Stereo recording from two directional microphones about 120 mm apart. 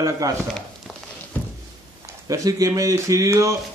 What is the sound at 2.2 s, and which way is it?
A man's voice, 25° right (ahead or behind).